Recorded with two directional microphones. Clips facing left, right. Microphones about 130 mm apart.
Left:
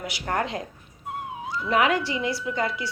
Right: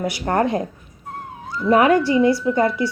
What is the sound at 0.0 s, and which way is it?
Speech, 35° right (ahead or behind).